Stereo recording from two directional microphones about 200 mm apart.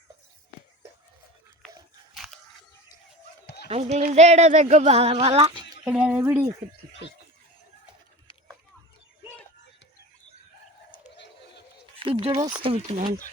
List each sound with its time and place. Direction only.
3.4 s a sound: 55° left (ahead or behind)
3.7 s speech: 35° right (ahead or behind)
5.8 s speech: 5° right (ahead or behind)
11.9 s speech: 25° right (ahead or behind)